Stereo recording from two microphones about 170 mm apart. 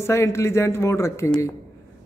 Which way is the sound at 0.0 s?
15° left (ahead or behind).